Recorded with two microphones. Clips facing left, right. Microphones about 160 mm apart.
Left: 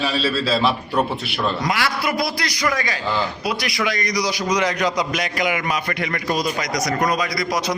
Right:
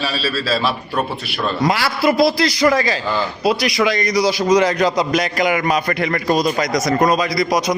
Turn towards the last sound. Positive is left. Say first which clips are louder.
# right 5 dB
turn(degrees=-20)  # may be behind; listen again after turning